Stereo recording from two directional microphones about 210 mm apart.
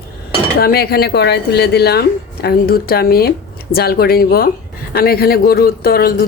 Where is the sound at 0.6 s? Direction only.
45° left (ahead or behind).